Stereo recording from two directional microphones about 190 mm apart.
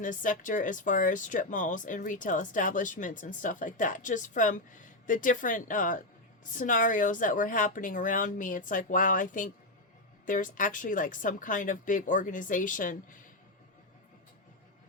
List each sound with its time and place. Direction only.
0.0 s speech: 45° left (ahead or behind)